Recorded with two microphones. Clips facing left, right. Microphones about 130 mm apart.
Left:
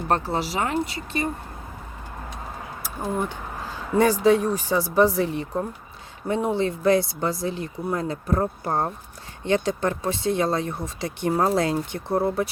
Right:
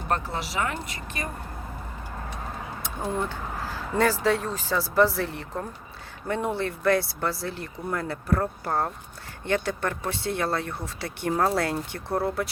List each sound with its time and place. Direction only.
0.1 s speech: 35° left (ahead or behind)
2.8 s speech: 5° left (ahead or behind)
3.2 s speech: 20° left (ahead or behind)